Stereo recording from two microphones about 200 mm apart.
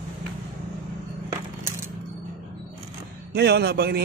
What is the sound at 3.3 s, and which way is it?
Speech, 55° right (ahead or behind).